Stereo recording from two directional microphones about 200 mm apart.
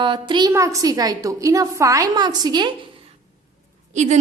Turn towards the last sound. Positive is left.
turn(degrees=-35)  # may be behind; listen again after turning